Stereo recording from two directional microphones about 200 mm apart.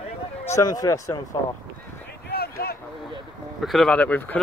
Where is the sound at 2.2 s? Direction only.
50° left (ahead or behind).